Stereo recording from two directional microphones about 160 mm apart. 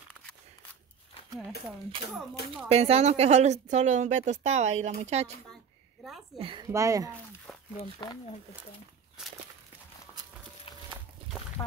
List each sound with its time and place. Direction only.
2.7 s a woman's voice: 40° right (ahead or behind)
6.4 s speech: 30° right (ahead or behind)
6.7 s speech: 20° right (ahead or behind)
7.5 s a sound: 5° left (ahead or behind)
7.8 s speech: 35° left (ahead or behind)